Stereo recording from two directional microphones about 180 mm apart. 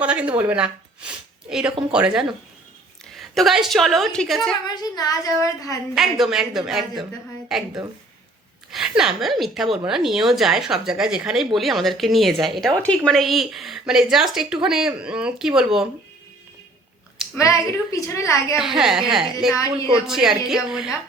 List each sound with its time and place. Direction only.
0.0 s a woman's voice: 5° right (ahead or behind)
4.6 s a woman's voice: 20° left (ahead or behind)
5.9 s a woman's voice: centre (ahead or behind)
8.7 s a woman's voice: 5° right (ahead or behind)
17.3 s a woman's voice: 15° left (ahead or behind)
18.5 s a woman's voice: centre (ahead or behind)